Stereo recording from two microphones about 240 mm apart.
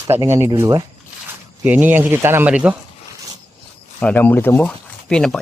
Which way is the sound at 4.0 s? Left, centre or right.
Centre.